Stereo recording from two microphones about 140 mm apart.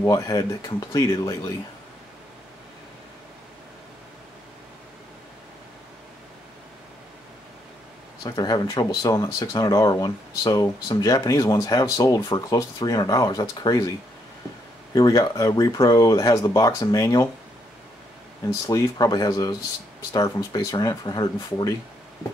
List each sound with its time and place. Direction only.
0.0 s speech: 25° left (ahead or behind)
8.2 s speech: 30° left (ahead or behind)
15.0 s speech: 25° left (ahead or behind)
18.5 s speech: 25° left (ahead or behind)